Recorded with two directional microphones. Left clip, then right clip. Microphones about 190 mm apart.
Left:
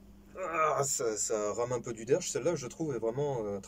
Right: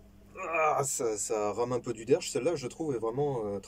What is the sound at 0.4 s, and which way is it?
Speech, 10° right (ahead or behind).